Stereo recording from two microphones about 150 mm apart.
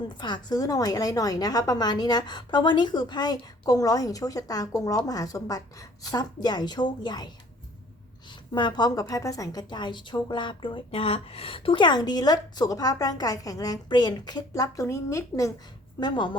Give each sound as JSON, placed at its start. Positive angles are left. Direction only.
{"t": 0.2, "sound": "a woman's voice", "side_deg": 30}
{"t": 8.5, "sound": "a woman's voice", "side_deg": 30}